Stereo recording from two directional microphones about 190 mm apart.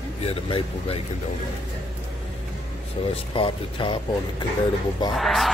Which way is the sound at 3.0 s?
30° left (ahead or behind).